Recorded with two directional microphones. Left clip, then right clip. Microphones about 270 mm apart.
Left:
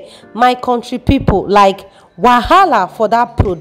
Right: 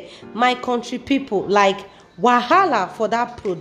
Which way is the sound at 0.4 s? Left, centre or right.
Left.